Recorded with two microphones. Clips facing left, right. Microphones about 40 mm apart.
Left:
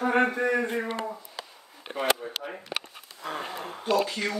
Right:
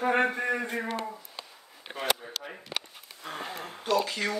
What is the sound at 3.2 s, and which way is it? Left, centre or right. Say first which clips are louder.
Speech: left 5 dB; centre.